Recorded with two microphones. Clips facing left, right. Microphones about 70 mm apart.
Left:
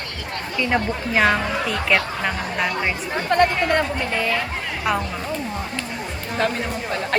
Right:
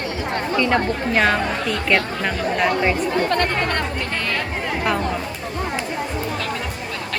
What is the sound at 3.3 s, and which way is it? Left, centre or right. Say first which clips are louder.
Speech: left 3 dB; centre.